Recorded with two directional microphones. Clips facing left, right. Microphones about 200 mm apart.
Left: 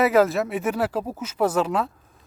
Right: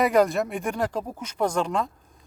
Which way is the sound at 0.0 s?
5° left (ahead or behind).